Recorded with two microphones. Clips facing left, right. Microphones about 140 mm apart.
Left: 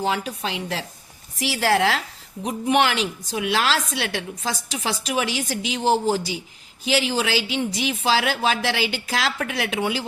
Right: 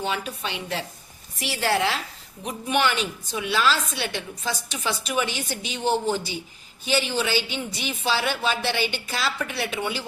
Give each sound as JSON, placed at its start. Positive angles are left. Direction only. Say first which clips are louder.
{"t": 0.0, "sound": "a woman's voice", "louder": "left 4 dB", "side_deg": 90}